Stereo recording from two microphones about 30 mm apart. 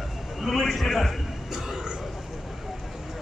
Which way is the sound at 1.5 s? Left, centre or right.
Centre.